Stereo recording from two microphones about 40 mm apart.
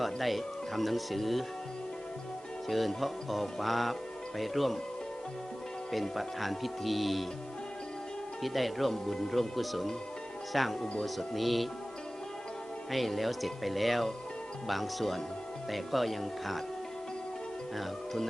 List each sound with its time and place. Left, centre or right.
0.0 s speech: centre
2.6 s speech: centre
5.9 s speech: centre
8.4 s speech: centre
10.8 s speech: left
11.3 s speech: centre
12.9 s speech: centre
17.7 s speech: centre